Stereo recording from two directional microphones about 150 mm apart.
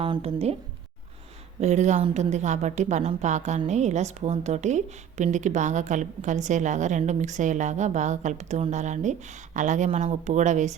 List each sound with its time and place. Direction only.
0.0 s speech: 40° right (ahead or behind)
1.6 s a woman's voice: 50° right (ahead or behind)